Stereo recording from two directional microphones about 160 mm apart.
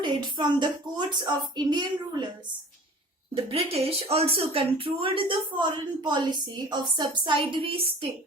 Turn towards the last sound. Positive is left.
turn(degrees=-35)  # may be behind; listen again after turning